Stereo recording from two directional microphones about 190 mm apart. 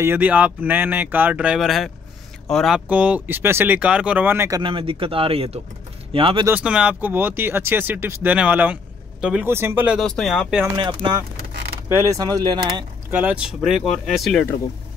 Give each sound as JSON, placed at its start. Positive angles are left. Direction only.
{"t": 0.0, "sound": "speech", "side_deg": -10}
{"t": 6.4, "sound": "speech", "side_deg": -5}
{"t": 10.8, "sound": "speech", "side_deg": -25}
{"t": 13.1, "sound": "speech", "side_deg": -5}